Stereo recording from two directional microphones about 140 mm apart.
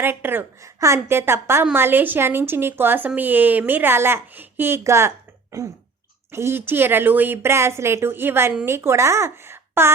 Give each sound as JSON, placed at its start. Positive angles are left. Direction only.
{"t": 0.0, "sound": "a woman's voice", "side_deg": -15}